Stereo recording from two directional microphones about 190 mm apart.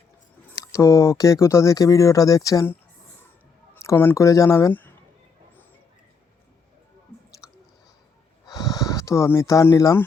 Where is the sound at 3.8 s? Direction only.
15° left (ahead or behind).